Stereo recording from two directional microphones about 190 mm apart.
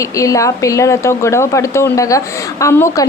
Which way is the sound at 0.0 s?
15° left (ahead or behind).